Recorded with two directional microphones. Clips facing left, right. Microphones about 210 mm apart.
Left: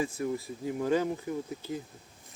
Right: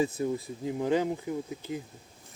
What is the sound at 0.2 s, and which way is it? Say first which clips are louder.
Speech: right 2 dB; 25° right (ahead or behind).